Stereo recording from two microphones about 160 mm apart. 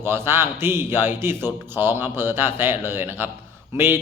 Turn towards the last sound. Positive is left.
turn(degrees=-15)  # may be behind; listen again after turning